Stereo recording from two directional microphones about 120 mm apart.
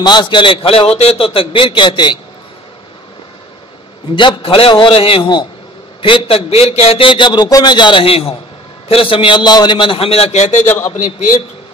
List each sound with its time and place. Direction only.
0.0 s a man's voice: 35° left (ahead or behind)
4.1 s a man's voice: 45° left (ahead or behind); by 11.3 s 60° left (ahead or behind)